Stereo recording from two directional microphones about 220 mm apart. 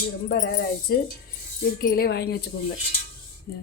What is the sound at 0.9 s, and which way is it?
Cutlery, 45° left (ahead or behind).